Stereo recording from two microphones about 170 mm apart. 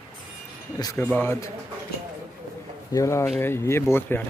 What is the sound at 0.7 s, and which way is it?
Speech, 20° left (ahead or behind).